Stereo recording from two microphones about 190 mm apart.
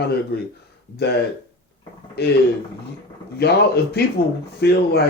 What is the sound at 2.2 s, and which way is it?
Speech, 55° left (ahead or behind).